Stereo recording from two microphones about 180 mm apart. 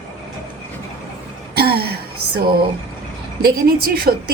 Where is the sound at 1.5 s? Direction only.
60° right (ahead or behind).